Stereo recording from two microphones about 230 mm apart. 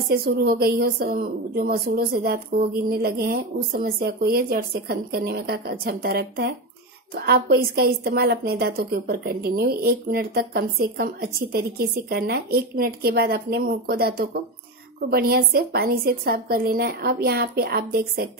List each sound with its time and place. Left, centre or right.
0.1 s a woman's voice: right